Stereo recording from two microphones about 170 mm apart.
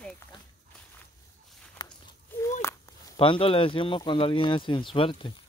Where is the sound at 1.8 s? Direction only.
25° left (ahead or behind).